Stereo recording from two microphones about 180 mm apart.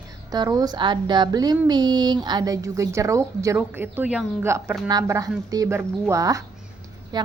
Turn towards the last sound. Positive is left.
turn(degrees=-25)  # may be behind; listen again after turning